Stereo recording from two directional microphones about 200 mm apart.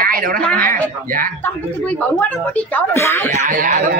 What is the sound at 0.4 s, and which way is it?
Speech, 5° left (ahead or behind).